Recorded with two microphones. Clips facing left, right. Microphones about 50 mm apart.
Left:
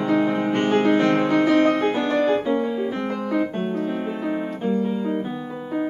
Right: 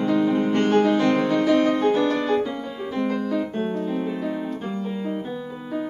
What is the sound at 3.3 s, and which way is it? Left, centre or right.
Piano, left.